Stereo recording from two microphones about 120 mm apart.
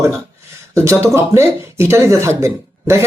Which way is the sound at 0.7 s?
25° right (ahead or behind).